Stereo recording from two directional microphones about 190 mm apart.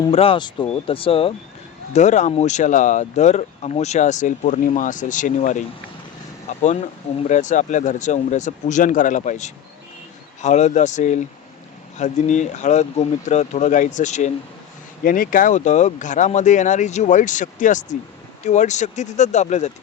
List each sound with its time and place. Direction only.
0.1 s speech: 30° left (ahead or behind)